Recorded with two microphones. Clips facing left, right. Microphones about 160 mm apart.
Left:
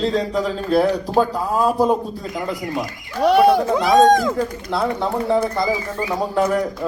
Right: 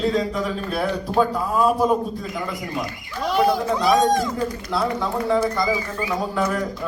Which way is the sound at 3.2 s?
65° left (ahead or behind).